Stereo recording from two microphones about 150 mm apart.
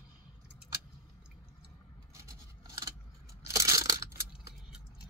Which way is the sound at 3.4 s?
20° right (ahead or behind).